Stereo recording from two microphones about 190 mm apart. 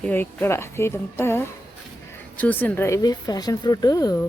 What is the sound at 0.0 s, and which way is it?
Speech, 10° left (ahead or behind).